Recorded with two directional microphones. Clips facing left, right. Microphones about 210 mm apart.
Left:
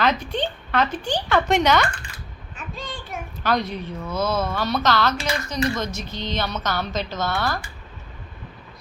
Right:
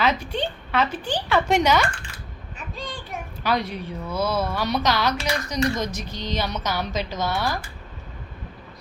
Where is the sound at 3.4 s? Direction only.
10° right (ahead or behind).